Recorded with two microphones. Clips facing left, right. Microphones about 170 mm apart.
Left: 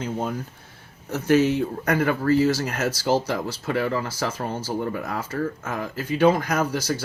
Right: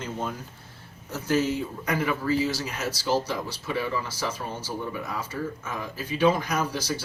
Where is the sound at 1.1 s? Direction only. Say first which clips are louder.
Left 6 dB; 70° left (ahead or behind).